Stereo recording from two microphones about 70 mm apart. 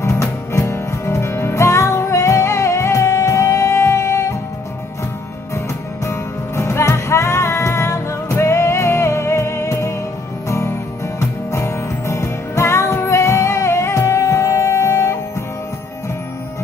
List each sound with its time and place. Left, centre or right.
0.0 s music: left
6.0 s music: left
11.1 s music: left